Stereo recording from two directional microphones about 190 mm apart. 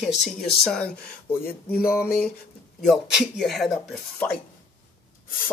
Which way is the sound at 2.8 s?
Centre (ahead or behind).